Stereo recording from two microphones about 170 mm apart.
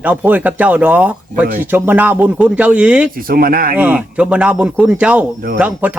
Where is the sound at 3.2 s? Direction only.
60° right (ahead or behind).